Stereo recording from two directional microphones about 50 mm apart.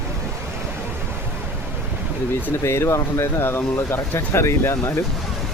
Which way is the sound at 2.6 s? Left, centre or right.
Left.